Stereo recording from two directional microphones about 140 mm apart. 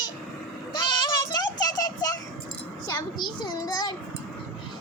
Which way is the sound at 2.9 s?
30° left (ahead or behind).